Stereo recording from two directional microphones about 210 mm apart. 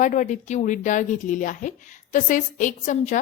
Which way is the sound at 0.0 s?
35° left (ahead or behind).